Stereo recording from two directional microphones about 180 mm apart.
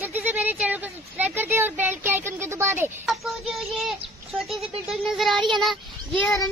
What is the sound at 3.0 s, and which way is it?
Child singing, centre (ahead or behind).